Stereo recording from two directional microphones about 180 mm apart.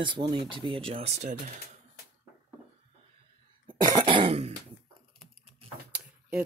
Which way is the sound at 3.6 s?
25° right (ahead or behind).